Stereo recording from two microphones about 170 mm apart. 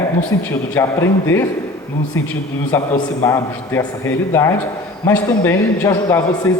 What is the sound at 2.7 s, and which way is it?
A man's voice, 15° left (ahead or behind).